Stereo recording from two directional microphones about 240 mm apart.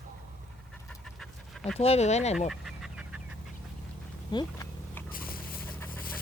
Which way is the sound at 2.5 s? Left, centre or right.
Centre.